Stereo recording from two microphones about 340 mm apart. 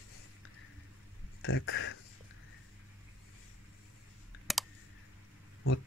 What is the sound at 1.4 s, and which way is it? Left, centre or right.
Speech, left.